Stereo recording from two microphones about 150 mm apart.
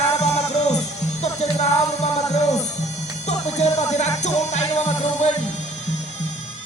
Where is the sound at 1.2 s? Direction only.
50° left (ahead or behind).